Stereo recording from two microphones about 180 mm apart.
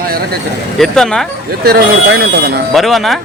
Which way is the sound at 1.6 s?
60° right (ahead or behind).